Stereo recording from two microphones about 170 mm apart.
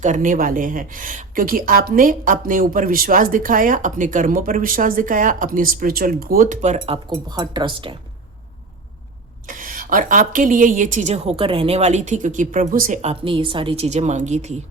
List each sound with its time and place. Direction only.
0.0 s speech: 45° right (ahead or behind)
6.7 s speech: 30° right (ahead or behind)
9.5 s speech: 55° right (ahead or behind)
13.0 s speech: 35° right (ahead or behind)